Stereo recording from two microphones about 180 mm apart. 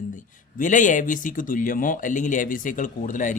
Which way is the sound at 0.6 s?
45° left (ahead or behind).